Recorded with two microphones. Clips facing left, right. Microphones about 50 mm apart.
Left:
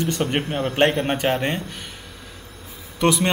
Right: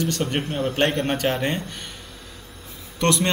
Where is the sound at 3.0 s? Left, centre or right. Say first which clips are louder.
Left 2 dB; centre.